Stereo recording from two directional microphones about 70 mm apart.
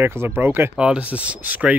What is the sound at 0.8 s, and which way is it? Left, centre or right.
Speech, centre.